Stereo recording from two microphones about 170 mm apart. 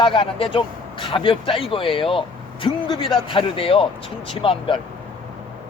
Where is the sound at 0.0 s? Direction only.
30° left (ahead or behind).